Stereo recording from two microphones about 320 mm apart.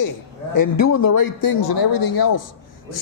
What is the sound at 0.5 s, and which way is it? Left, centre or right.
Speech, left.